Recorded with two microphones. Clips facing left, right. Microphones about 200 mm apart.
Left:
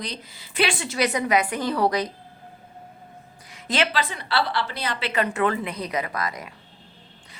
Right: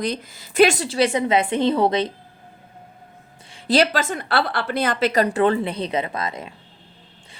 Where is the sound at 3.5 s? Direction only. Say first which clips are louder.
Right 6 dB; 35° right (ahead or behind).